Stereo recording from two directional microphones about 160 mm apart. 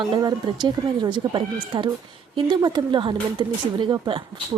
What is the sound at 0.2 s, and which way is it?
Speech, 25° right (ahead or behind).